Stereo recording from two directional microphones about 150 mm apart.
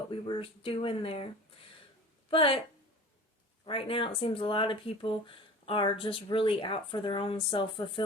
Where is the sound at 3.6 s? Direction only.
35° left (ahead or behind).